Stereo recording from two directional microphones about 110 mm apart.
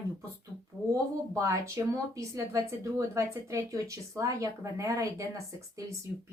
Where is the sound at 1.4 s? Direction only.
25° right (ahead or behind).